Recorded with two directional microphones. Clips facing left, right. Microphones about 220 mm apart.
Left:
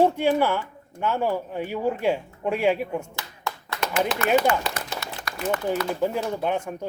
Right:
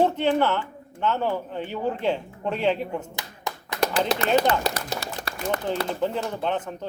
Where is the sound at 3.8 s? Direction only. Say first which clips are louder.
Right 2 dB; 35° right (ahead or behind).